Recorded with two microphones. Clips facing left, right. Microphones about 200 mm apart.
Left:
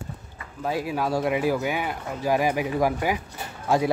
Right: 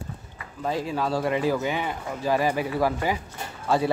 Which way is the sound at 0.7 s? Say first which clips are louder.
Even; 10° left (ahead or behind).